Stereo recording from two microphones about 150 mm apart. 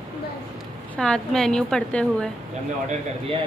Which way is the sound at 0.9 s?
5° left (ahead or behind).